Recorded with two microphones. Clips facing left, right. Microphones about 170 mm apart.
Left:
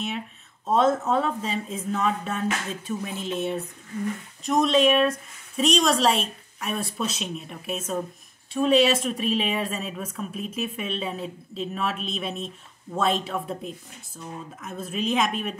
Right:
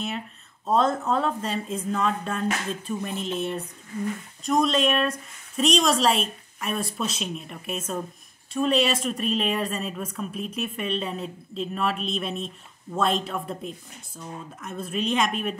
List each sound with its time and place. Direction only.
0.7 s a woman's voice: centre (ahead or behind)